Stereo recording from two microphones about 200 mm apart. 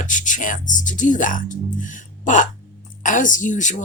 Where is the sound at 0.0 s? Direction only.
40° left (ahead or behind).